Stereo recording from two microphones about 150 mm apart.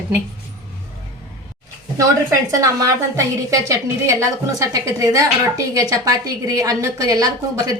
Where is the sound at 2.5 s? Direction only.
20° right (ahead or behind).